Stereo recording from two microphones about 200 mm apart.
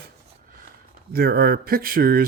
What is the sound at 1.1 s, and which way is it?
Speech, 50° right (ahead or behind).